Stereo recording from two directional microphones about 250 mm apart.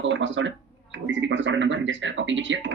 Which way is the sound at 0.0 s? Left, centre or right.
Right.